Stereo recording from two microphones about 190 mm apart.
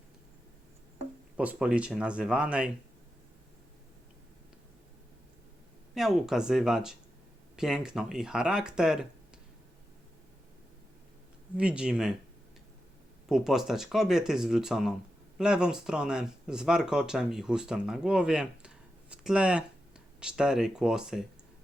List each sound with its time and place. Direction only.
1.4 s speech: 5° right (ahead or behind)
5.9 s speech: centre (ahead or behind)
11.5 s speech: 5° right (ahead or behind)
13.2 s speech: centre (ahead or behind)